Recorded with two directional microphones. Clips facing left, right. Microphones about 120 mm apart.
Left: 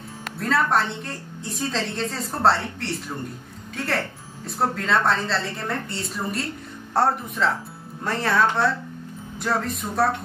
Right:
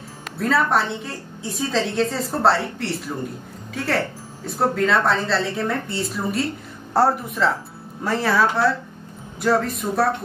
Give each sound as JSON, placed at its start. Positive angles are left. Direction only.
{"t": 0.4, "sound": "a woman's voice", "side_deg": 0}